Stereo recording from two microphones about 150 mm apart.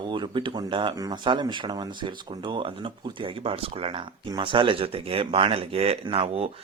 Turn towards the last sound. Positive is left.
turn(degrees=-40)  # may be behind; listen again after turning